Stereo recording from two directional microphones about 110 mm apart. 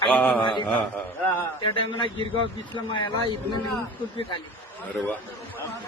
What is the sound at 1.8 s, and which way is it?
A man's voice, 50° left (ahead or behind).